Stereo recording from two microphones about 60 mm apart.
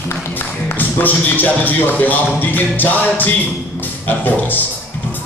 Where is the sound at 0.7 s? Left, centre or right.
Left.